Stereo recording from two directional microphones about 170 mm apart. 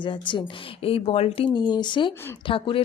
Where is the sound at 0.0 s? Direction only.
30° left (ahead or behind).